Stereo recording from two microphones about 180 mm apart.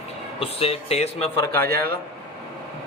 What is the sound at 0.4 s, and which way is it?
Speech, 35° left (ahead or behind).